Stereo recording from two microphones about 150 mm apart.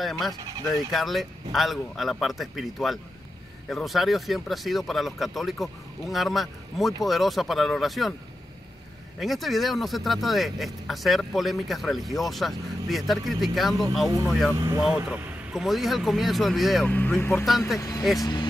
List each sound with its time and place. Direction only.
0.0 s speech: centre (ahead or behind)
9.2 s speech: centre (ahead or behind)
16.8 s speech: 10° left (ahead or behind); by 18.5 s 30° left (ahead or behind)